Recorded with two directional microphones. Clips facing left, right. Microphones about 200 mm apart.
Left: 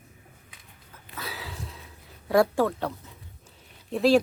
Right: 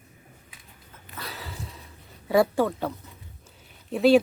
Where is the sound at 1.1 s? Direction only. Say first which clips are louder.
Left 1 dB; centre (ahead or behind).